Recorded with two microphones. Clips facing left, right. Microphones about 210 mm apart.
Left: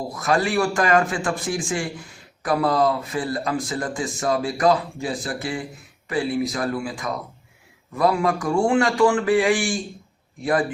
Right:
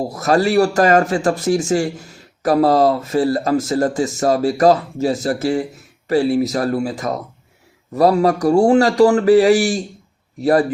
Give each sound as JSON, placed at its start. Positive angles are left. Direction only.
{"t": 0.1, "sound": "speech", "side_deg": -40}